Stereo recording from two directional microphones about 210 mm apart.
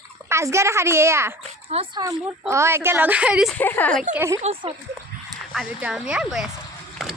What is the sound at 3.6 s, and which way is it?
Speech, 10° left (ahead or behind).